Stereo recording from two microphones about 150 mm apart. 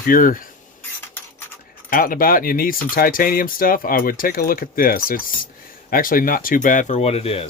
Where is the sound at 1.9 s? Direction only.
70° left (ahead or behind).